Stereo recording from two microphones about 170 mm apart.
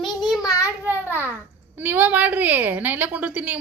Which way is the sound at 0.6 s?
10° right (ahead or behind).